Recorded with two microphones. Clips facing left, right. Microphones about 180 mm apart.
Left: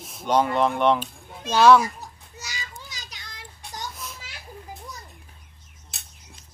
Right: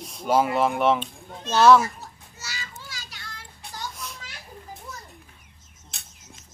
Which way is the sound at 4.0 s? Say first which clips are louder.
Even; centre (ahead or behind).